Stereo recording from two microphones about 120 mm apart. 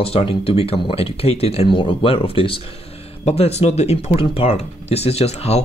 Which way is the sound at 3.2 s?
60° left (ahead or behind).